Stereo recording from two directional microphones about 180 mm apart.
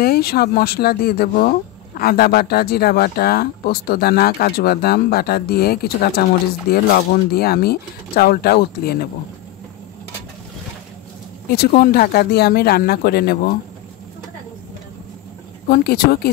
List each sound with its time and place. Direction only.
0.0 s speech: 60° left (ahead or behind)
11.5 s speech: 60° left (ahead or behind)
15.7 s speech: 60° left (ahead or behind)